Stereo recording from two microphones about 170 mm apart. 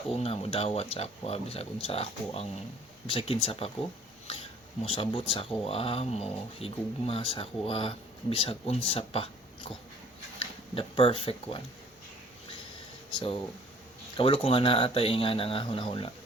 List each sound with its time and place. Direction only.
0.1 s speech: 35° left (ahead or behind)
4.8 s speech: 35° left (ahead or behind)
10.4 s speech: 30° left (ahead or behind)
13.1 s speech: 30° left (ahead or behind)